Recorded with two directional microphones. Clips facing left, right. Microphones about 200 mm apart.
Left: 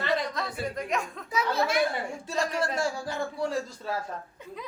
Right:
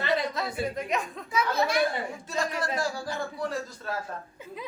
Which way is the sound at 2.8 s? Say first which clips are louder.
Left 1 dB; 25° left (ahead or behind).